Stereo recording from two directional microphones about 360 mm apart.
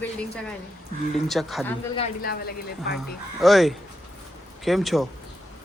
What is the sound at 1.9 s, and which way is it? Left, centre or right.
Speech, left.